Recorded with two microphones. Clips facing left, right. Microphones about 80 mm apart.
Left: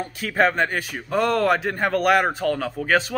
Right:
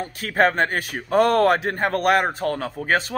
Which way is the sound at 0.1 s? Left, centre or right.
Right.